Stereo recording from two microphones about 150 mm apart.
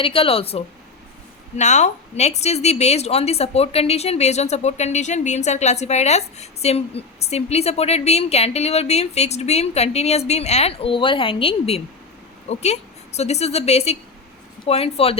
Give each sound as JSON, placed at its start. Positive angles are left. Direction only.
{"t": 0.0, "sound": "speech", "side_deg": 40}
{"t": 1.5, "sound": "a woman's voice", "side_deg": 50}